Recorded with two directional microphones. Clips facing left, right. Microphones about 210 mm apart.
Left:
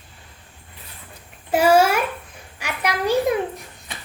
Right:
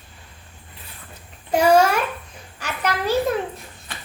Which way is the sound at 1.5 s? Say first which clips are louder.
Even; 5° left (ahead or behind).